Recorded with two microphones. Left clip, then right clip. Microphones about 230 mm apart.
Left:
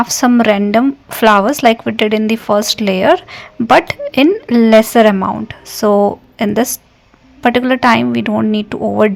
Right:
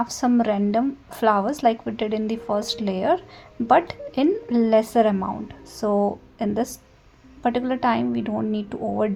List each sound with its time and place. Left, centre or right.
0.0 s a woman's voice: left